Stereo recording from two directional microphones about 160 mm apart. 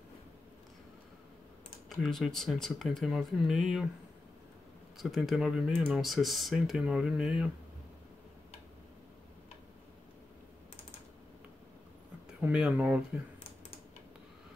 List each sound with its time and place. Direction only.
2.0 s speech: centre (ahead or behind)
4.9 s speech: centre (ahead or behind)
12.3 s speech: 10° right (ahead or behind)